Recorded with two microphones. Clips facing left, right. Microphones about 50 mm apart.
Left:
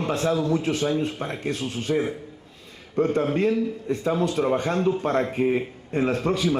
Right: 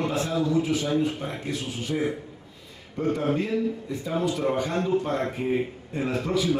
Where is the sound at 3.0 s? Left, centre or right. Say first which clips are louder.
Left 4 dB; left.